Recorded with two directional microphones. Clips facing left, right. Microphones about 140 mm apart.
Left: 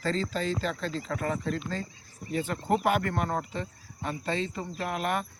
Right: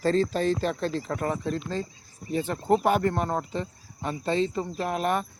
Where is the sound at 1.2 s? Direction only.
25° right (ahead or behind).